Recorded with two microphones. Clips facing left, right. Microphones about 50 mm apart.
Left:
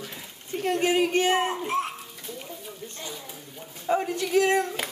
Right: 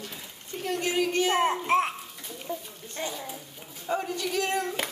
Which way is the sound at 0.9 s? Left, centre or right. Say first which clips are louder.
Even; left.